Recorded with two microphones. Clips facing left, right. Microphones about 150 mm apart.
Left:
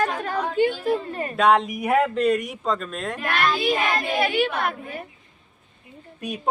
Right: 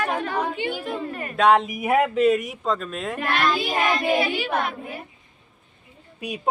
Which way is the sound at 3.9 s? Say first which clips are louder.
Even; 55° left (ahead or behind).